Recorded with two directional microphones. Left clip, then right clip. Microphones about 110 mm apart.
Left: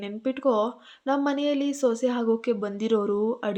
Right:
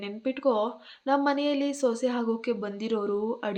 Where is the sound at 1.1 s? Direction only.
30° left (ahead or behind).